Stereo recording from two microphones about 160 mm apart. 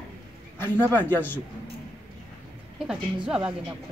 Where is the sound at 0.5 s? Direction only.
15° left (ahead or behind).